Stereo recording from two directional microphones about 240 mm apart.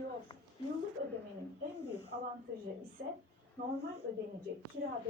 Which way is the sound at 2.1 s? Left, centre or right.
Right.